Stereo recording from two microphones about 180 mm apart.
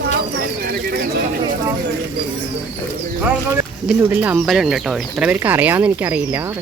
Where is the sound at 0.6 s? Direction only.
60° right (ahead or behind).